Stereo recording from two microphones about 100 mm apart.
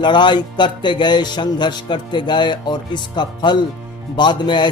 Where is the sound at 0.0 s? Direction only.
50° left (ahead or behind).